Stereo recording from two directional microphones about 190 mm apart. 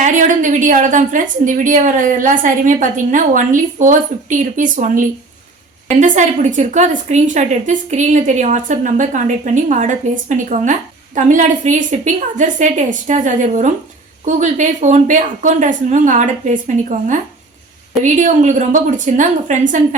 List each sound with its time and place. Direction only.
0.0 s a woman's voice: 40° right (ahead or behind)
18.0 s a woman's voice: 40° right (ahead or behind)